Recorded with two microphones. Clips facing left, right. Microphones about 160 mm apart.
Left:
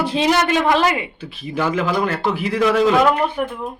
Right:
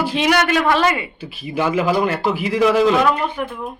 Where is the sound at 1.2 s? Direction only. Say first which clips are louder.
Right 3 dB; 5° right (ahead or behind).